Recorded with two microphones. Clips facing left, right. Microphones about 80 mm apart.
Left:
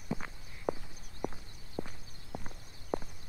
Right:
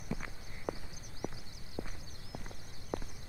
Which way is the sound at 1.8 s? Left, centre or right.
Centre.